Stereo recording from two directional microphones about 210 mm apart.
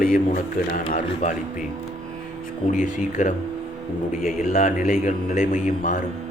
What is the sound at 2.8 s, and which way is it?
A man's voice, 40° left (ahead or behind).